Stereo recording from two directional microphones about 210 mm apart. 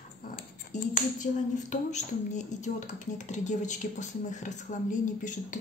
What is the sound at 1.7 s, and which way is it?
Speech, 35° left (ahead or behind).